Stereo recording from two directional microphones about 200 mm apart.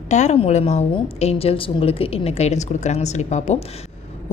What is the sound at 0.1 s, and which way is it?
A woman's voice, 35° left (ahead or behind).